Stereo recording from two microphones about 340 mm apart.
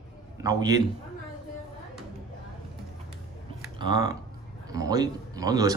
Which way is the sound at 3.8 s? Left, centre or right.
Centre.